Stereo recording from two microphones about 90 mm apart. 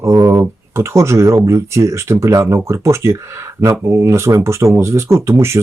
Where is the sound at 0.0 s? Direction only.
35° right (ahead or behind).